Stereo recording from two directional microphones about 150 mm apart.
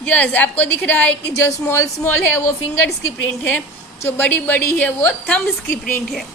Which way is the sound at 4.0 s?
10° left (ahead or behind).